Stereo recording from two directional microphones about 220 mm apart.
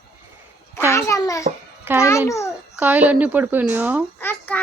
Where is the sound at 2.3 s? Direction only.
15° left (ahead or behind).